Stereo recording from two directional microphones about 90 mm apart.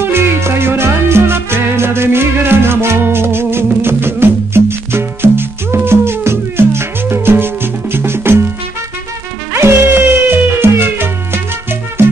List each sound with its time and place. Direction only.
0.0 s music: 25° right (ahead or behind)
9.5 s music: 30° right (ahead or behind)